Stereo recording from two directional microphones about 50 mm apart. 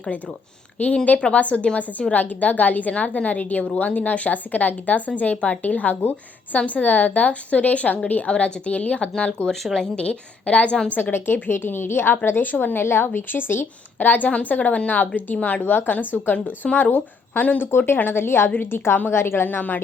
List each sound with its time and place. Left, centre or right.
1.0 s a woman's voice: left; by 10.0 s centre
10.0 s a woman's voice: left
10.9 s speech: left
14.1 s a woman's voice: left
17.6 s speech: left
19.5 s a woman's voice: left